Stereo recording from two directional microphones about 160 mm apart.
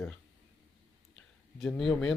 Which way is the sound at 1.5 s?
Centre (ahead or behind).